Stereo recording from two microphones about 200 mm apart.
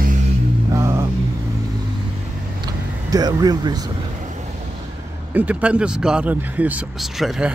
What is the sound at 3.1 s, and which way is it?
Speech, 20° right (ahead or behind).